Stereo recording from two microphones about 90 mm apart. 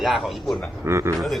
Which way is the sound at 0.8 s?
30° right (ahead or behind).